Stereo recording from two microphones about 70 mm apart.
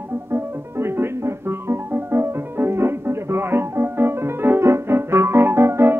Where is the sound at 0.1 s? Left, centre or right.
Right.